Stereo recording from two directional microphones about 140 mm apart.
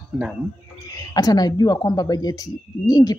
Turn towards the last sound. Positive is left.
turn(degrees=30)  # may be behind; listen again after turning